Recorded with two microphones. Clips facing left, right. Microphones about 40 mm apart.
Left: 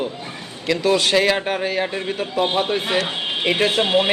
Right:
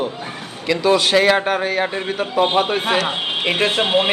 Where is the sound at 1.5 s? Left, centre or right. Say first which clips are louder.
Right 3 dB; right.